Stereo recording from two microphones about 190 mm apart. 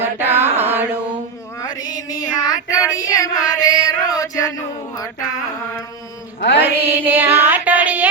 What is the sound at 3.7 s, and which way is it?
Chant, 20° left (ahead or behind).